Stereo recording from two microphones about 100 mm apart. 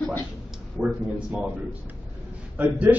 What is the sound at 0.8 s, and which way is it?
Speech, 10° right (ahead or behind).